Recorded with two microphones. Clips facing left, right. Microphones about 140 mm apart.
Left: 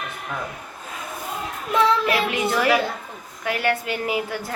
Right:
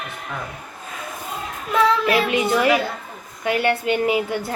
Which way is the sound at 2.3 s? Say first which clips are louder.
Right 2 dB; 20° right (ahead or behind).